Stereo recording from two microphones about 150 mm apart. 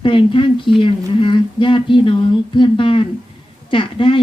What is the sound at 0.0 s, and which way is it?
A woman's voice, 35° left (ahead or behind).